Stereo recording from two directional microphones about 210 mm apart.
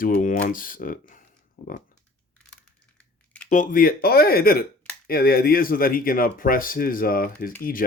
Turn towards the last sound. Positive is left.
turn(degrees=45)  # may be behind; listen again after turning